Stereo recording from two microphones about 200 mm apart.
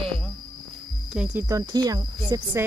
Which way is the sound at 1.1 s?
5° right (ahead or behind).